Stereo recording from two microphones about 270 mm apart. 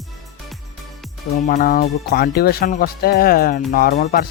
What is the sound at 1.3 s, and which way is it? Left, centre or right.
Speech, left.